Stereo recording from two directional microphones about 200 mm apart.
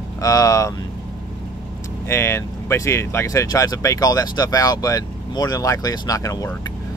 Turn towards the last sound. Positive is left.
turn(degrees=15)  # may be behind; listen again after turning